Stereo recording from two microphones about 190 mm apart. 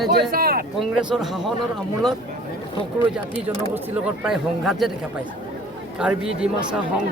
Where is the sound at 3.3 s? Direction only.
5° right (ahead or behind).